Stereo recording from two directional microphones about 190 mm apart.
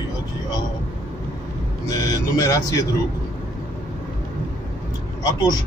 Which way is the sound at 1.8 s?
20° left (ahead or behind).